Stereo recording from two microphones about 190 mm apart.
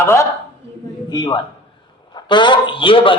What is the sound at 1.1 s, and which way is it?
A man's voice, 25° left (ahead or behind).